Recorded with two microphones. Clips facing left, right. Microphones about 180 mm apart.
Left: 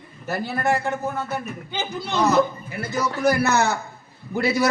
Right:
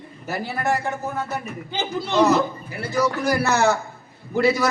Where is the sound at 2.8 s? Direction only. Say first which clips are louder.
Even; 35° right (ahead or behind).